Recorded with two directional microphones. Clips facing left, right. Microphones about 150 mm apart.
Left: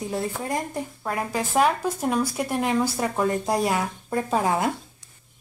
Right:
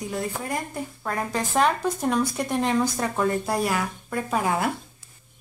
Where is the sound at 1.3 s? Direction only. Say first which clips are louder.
Left 1 dB; 10° left (ahead or behind).